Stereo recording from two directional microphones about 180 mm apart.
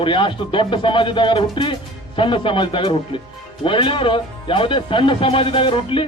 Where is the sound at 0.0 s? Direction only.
25° left (ahead or behind).